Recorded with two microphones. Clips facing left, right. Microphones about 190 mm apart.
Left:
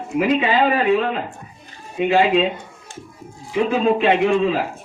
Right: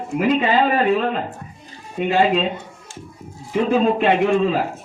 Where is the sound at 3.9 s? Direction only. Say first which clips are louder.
Even; 50° right (ahead or behind).